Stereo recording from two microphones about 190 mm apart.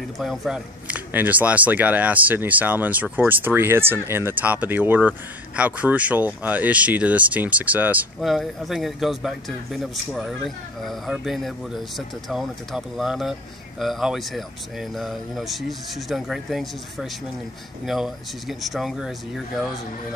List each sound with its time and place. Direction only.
0.2 s speech: 5° right (ahead or behind)